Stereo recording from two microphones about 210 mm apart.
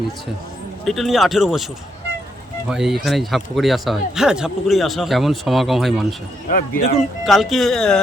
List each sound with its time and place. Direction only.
0.9 s speech: centre (ahead or behind)
2.6 s speech: centre (ahead or behind)
6.5 s a man's voice: 40° left (ahead or behind)
7.3 s speech: centre (ahead or behind)